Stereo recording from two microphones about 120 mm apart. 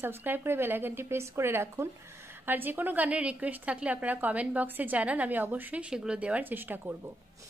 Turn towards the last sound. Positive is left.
turn(degrees=-15)  # may be behind; listen again after turning